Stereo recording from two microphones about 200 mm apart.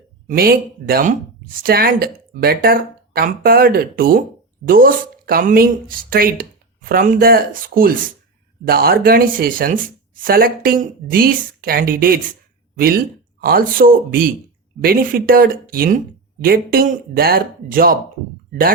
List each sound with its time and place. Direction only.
0.3 s speech: 50° right (ahead or behind)